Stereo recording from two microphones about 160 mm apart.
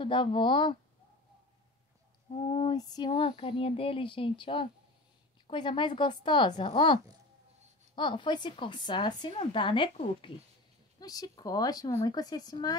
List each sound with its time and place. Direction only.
0.0 s speech: 30° left (ahead or behind)
2.3 s speech: 35° left (ahead or behind)